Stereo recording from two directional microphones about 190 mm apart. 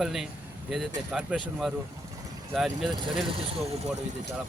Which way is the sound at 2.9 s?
25° right (ahead or behind).